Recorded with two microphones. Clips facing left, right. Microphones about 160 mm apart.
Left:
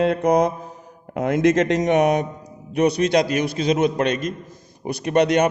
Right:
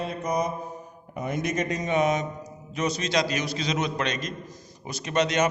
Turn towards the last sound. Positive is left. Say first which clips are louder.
# left 7 dB
turn(degrees=55)  # may be behind; listen again after turning